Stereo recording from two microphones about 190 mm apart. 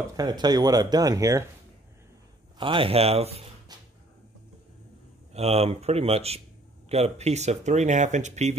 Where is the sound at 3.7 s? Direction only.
20° right (ahead or behind).